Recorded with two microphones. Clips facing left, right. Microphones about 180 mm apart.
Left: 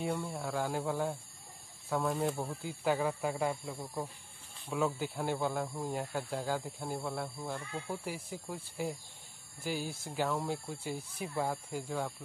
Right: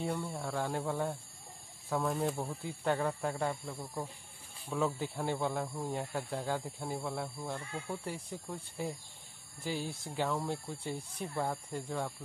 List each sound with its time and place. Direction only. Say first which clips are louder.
0.0 s speech: left 1 dB; centre (ahead or behind)